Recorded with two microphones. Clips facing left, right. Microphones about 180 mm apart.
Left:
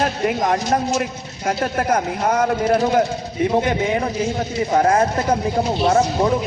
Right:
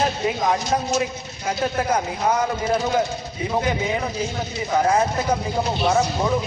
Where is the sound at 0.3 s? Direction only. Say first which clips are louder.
Left 5 dB; 55° left (ahead or behind).